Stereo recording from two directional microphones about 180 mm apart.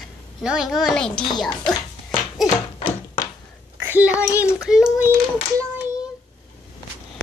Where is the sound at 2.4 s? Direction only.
20° left (ahead or behind).